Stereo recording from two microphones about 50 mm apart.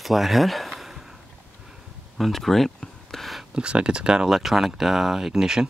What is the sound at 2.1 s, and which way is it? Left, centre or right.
Speech, centre.